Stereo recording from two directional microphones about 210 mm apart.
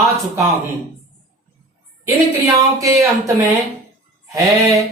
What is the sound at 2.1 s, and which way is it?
Speech, 15° right (ahead or behind).